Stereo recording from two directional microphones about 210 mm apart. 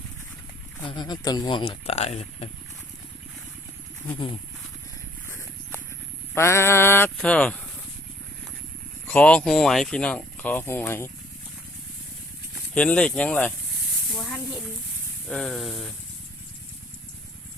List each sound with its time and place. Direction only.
0.9 s speech: 20° left (ahead or behind)
6.3 s speech: 10° left (ahead or behind)
9.0 s speech: 5° left (ahead or behind)
12.7 s speech: 5° left (ahead or behind)